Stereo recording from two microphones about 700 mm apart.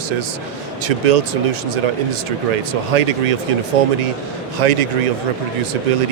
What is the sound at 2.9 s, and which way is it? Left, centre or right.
Speech, right.